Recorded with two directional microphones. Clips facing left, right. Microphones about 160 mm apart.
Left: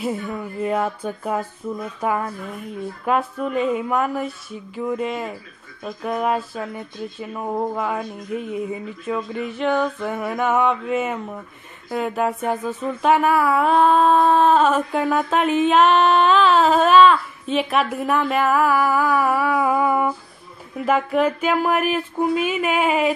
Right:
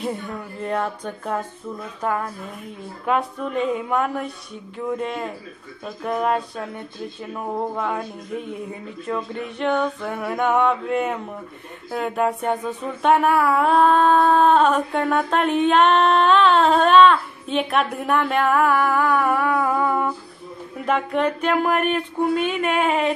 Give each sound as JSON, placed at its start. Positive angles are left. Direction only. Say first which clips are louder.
{"t": 0.0, "sound": "music", "louder": "left 2 dB", "side_deg": 5}
{"t": 2.0, "sound": "speech", "louder": "even", "side_deg": 5}